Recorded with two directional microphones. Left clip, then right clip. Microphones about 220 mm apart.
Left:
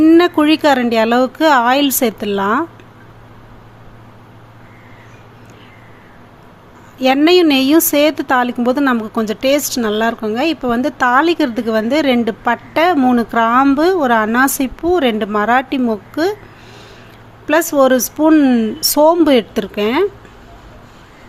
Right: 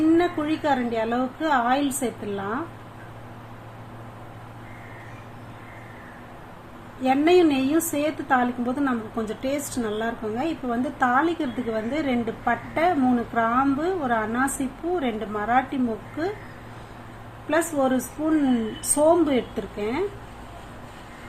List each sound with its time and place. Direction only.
0.1 s a woman's voice: 50° left (ahead or behind)
7.0 s a woman's voice: 45° left (ahead or behind)
17.5 s a woman's voice: 50° left (ahead or behind)